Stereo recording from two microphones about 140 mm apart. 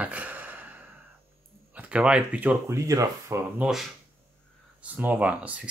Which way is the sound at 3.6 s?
Centre (ahead or behind).